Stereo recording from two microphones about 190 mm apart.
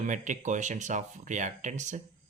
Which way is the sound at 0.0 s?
40° right (ahead or behind).